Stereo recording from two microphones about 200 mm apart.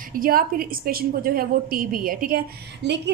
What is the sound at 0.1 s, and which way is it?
A woman's voice, 45° right (ahead or behind).